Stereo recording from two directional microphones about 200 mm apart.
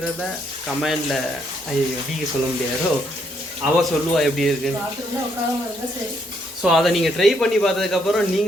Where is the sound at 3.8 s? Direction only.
Centre (ahead or behind).